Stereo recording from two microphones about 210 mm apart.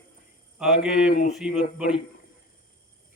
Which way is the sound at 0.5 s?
5° right (ahead or behind).